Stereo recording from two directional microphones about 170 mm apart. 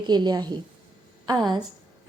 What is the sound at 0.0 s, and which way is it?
Speech, 25° right (ahead or behind).